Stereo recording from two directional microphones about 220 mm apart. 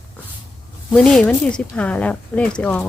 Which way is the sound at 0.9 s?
5° left (ahead or behind).